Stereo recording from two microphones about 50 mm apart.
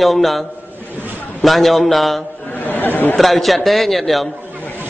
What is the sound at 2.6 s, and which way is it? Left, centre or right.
Speech, left.